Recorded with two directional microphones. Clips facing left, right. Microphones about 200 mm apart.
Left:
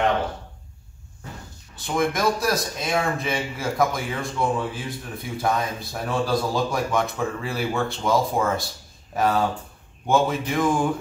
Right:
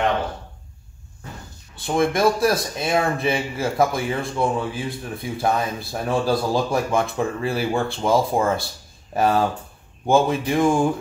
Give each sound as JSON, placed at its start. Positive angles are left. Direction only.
{"t": 2.0, "sound": "speech", "side_deg": -30}